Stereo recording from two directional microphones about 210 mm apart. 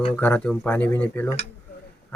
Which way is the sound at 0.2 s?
5° left (ahead or behind).